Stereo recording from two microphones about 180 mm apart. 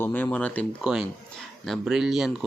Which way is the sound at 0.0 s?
10° left (ahead or behind).